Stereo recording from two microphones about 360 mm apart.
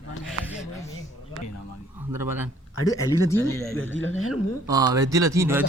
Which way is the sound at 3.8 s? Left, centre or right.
Left.